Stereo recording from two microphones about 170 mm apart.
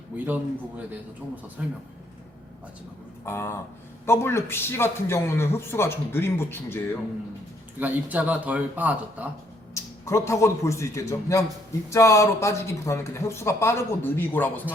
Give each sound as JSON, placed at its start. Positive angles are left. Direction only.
{"t": 0.3, "sound": "speech", "side_deg": -10}
{"t": 3.2, "sound": "a man's voice", "side_deg": 15}
{"t": 7.8, "sound": "speech", "side_deg": -10}
{"t": 9.7, "sound": "a man's voice", "side_deg": 15}